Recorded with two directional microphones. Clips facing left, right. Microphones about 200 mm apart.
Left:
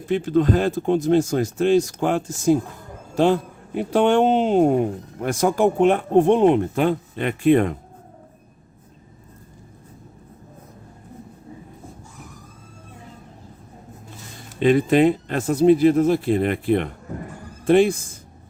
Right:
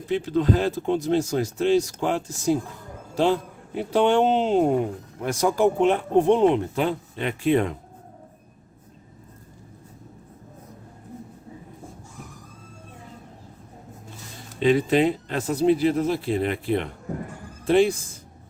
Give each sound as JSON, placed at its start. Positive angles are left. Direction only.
{"t": 0.1, "sound": "speech", "side_deg": 50}
{"t": 3.8, "sound": "speech", "side_deg": 50}
{"t": 14.6, "sound": "speech", "side_deg": 50}